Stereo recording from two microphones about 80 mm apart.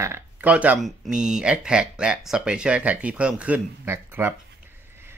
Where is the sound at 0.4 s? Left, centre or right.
Centre.